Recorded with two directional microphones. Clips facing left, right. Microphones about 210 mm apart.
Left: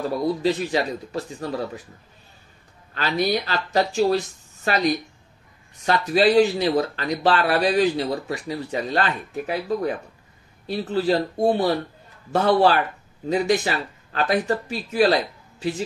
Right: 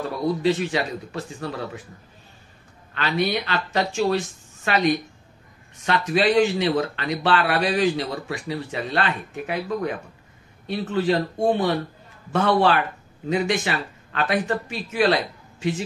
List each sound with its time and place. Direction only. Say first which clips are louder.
0.4 s speech: even; 35° left (ahead or behind)
2.9 s speech: left 1 dB; 35° left (ahead or behind)